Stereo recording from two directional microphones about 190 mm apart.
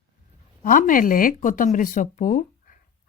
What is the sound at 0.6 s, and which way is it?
Speech, 45° left (ahead or behind).